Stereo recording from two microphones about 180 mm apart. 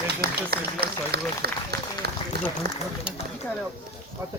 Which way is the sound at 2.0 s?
60° right (ahead or behind).